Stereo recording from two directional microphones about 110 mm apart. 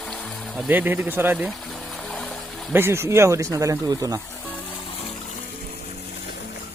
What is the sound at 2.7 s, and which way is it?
Speech, 20° right (ahead or behind).